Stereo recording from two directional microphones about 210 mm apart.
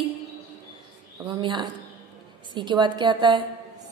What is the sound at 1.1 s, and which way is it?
A woman's voice, 20° right (ahead or behind).